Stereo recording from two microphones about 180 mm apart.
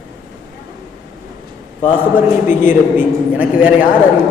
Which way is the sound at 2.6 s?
10° right (ahead or behind).